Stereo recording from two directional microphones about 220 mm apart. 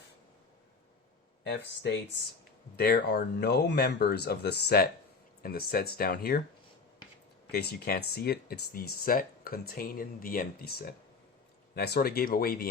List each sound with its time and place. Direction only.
2.7 s speech: 45° left (ahead or behind)
7.5 s speech: 45° left (ahead or behind)